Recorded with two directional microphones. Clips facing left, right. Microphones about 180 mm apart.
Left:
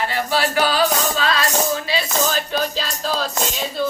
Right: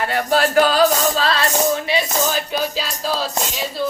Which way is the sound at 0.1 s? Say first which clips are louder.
Right 4 dB; 50° right (ahead or behind).